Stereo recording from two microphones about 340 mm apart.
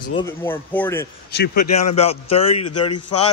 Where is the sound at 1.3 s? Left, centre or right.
Left.